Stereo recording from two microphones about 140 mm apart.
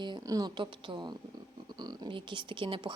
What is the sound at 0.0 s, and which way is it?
Speech, 30° right (ahead or behind).